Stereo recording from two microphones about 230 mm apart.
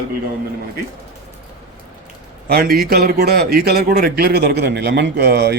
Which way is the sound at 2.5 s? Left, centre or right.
Right.